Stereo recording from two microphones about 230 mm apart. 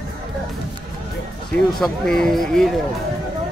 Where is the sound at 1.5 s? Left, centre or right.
Centre.